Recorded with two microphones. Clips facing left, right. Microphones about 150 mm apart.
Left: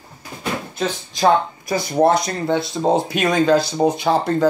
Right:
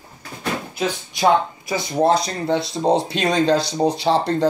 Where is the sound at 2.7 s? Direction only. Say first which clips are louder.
Left 1 dB; 25° right (ahead or behind).